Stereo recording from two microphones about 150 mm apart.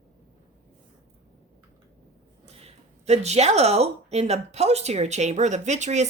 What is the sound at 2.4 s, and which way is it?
A woman's voice, 45° right (ahead or behind).